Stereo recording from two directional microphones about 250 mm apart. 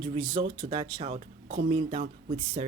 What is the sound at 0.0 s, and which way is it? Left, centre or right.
A woman's voice, right.